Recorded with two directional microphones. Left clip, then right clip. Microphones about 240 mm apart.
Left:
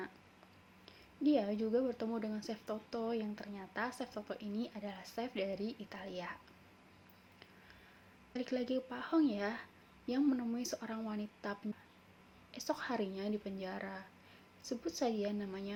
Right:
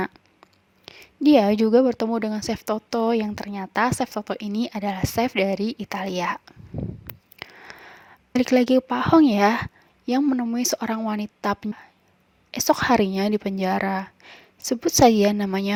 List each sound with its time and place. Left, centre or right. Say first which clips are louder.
0.9 s speech: right 16 dB; right
7.7 s a sound: right 19 dB; right
8.3 s speech: right 19 dB; right